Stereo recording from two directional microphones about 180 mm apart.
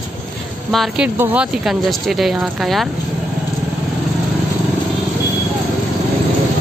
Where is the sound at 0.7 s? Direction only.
Centre (ahead or behind).